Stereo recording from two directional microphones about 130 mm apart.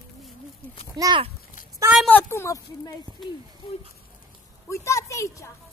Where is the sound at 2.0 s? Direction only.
15° left (ahead or behind).